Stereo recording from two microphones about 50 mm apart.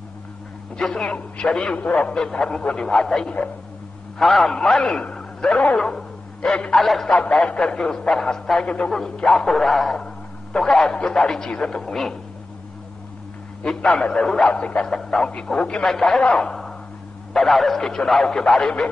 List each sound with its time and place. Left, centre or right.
0.7 s speech: centre
1.8 s a man's voice: left; by 4.6 s centre
4.6 s speech: centre
5.9 s bow-wow: centre
6.8 s a man's voice: centre
7.1 s speech: left
8.6 s speech: left
8.9 s speech: centre
9.6 s a man's voice: centre
13.9 s speech: centre
14.5 s bow-wow: left
14.8 s speech: centre
17.3 s speech: centre